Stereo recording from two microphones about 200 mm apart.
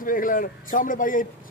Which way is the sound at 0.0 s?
45° left (ahead or behind).